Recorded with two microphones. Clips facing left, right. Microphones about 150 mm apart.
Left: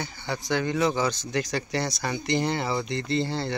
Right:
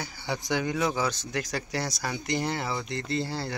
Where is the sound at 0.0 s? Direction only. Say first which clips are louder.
Left 1 dB; 10° right (ahead or behind).